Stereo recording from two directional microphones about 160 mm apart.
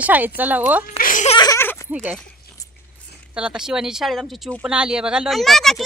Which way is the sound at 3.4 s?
5° right (ahead or behind).